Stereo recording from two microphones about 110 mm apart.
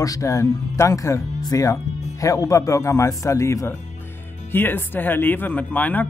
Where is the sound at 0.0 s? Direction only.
30° left (ahead or behind).